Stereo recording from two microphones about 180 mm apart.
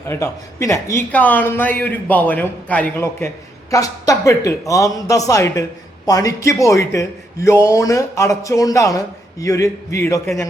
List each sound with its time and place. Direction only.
0.1 s a man's voice: 15° left (ahead or behind)